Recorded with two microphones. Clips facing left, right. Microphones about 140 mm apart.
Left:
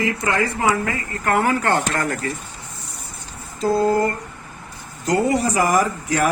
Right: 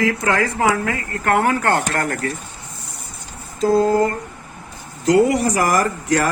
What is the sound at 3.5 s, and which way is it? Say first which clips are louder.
Speech: right 3 dB; 90° right.